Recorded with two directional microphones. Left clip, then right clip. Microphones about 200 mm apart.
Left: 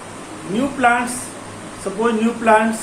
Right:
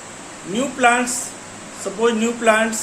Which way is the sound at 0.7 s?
35° right (ahead or behind).